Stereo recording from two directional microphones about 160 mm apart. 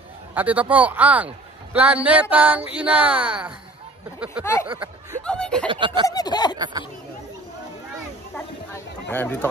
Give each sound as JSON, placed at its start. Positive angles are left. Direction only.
{"t": 0.3, "sound": "a man's voice", "side_deg": -10}
{"t": 4.6, "sound": "a man's voice", "side_deg": -10}
{"t": 5.2, "sound": "speech", "side_deg": 5}
{"t": 5.7, "sound": "a sound", "side_deg": -30}
{"t": 6.0, "sound": "a sound", "side_deg": 25}
{"t": 8.7, "sound": "speech", "side_deg": 15}